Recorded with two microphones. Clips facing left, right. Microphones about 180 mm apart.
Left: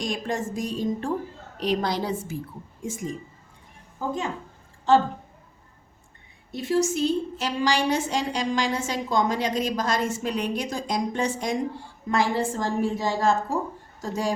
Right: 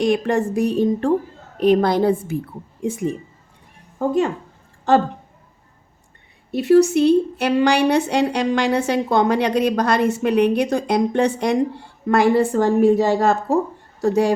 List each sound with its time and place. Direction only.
0.0 s a woman's voice: 65° right (ahead or behind)
6.5 s a woman's voice: 65° right (ahead or behind)